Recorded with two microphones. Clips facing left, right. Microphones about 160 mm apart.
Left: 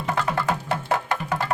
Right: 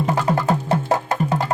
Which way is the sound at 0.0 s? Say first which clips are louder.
Right 5 dB; 35° right (ahead or behind).